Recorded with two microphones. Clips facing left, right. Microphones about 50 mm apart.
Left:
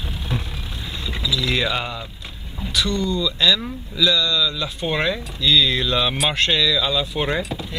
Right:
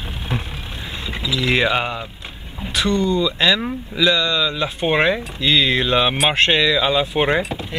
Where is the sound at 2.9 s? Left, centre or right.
Centre.